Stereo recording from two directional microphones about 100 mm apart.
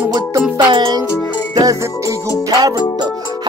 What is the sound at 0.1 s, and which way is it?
Music, 45° right (ahead or behind).